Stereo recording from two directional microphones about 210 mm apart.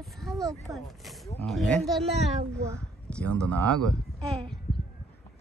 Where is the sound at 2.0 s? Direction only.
30° right (ahead or behind).